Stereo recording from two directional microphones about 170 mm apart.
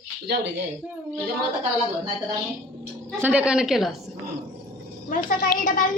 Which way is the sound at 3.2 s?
5° right (ahead or behind).